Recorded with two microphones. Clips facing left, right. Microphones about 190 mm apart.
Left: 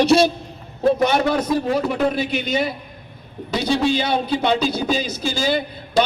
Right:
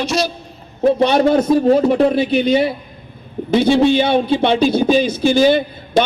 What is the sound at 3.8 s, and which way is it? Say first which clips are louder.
Speech: right 7 dB; 55° right (ahead or behind).